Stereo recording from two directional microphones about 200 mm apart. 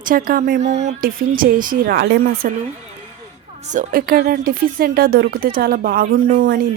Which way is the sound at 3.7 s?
45° right (ahead or behind).